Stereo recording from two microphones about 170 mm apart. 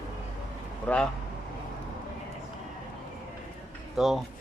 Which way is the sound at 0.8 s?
5° left (ahead or behind).